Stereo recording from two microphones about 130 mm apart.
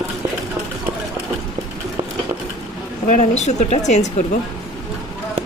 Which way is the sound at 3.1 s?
70° left (ahead or behind).